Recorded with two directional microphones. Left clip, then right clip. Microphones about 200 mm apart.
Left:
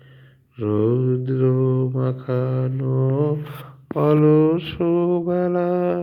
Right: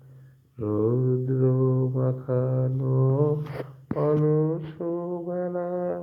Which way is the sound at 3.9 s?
40° left (ahead or behind).